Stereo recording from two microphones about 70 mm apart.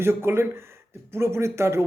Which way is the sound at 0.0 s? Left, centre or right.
Right.